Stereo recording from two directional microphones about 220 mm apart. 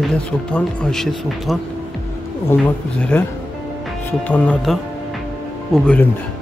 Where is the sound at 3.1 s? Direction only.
5° left (ahead or behind).